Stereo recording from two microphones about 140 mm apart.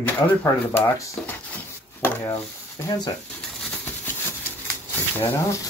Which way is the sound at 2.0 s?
15° left (ahead or behind).